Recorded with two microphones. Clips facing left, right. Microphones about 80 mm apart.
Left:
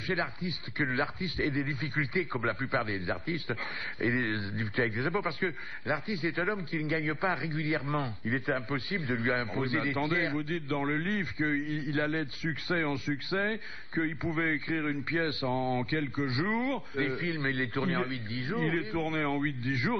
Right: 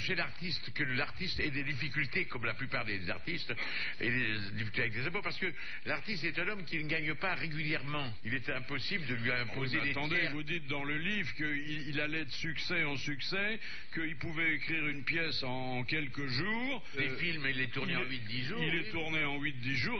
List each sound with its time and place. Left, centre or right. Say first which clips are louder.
0.0 s a man's voice: left 6 dB; left